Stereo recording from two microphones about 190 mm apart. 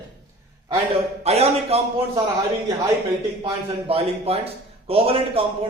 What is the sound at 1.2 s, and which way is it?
Speech, 35° right (ahead or behind).